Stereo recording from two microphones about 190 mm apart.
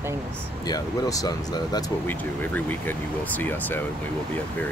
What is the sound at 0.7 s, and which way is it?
Speech, 20° left (ahead or behind).